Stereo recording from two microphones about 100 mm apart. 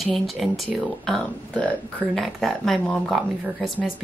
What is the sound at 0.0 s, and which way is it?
Speech, centre (ahead or behind).